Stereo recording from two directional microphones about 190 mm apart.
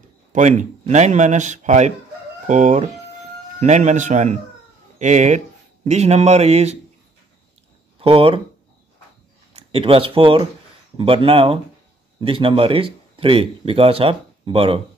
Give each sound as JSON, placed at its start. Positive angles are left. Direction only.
{"t": 0.3, "sound": "speech", "side_deg": -40}
{"t": 8.0, "sound": "speech", "side_deg": -30}
{"t": 9.5, "sound": "speech", "side_deg": -30}